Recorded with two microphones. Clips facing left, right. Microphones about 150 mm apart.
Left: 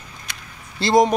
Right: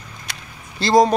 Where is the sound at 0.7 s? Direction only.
25° left (ahead or behind).